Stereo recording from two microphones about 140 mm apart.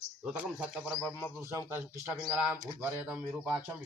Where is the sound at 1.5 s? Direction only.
20° right (ahead or behind).